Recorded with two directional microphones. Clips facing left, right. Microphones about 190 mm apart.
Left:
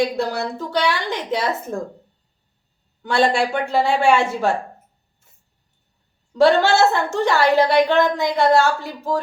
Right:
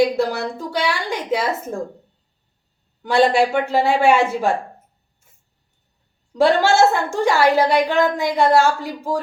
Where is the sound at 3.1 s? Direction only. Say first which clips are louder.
Right 3 dB; 5° right (ahead or behind).